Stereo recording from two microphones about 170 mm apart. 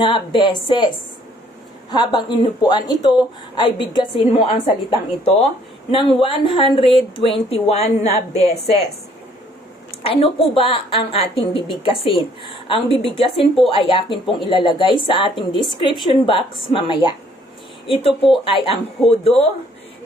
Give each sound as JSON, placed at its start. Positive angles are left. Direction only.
{"t": 0.0, "sound": "a woman's voice", "side_deg": 30}
{"t": 1.9, "sound": "a woman's voice", "side_deg": 25}
{"t": 10.0, "sound": "a woman's voice", "side_deg": 35}